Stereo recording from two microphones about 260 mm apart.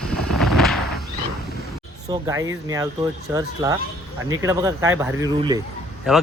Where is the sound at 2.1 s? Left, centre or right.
Centre.